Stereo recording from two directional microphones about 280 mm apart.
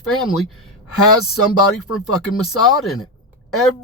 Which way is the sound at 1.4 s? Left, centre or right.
Left.